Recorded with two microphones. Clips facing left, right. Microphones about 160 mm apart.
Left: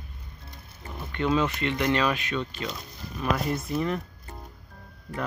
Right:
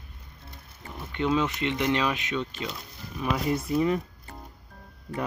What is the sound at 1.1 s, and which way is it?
Speech, 15° right (ahead or behind).